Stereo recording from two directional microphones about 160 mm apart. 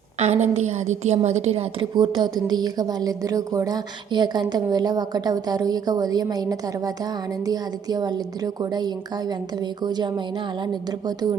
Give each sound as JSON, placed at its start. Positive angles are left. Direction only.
{"t": 0.2, "sound": "a woman's voice", "side_deg": -45}